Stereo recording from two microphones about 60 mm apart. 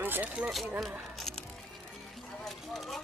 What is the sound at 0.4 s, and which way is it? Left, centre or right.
Speech, centre.